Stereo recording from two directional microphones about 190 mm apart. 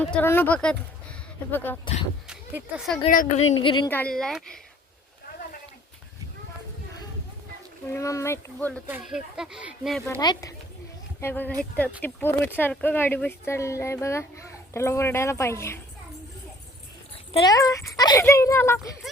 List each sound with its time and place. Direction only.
0.0 s speech: 10° left (ahead or behind)
2.2 s a sound: 5° right (ahead or behind)
3.1 s a woman's voice: 45° left (ahead or behind)
3.6 s speech: 25° left (ahead or behind)
3.8 s speech: 10° left (ahead or behind)
7.9 s speech: 15° left (ahead or behind)
8.9 s speech: 5° right (ahead or behind)
10.2 s speech: 20° left (ahead or behind)
17.3 s speech: 20° left (ahead or behind)